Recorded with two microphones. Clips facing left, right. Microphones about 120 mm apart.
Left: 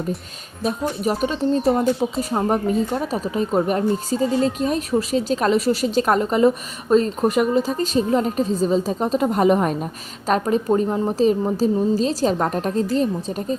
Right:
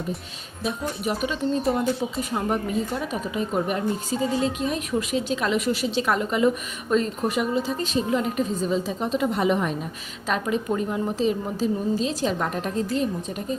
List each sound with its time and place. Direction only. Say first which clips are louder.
1.0 s speech: left 5 dB; 35° left (ahead or behind)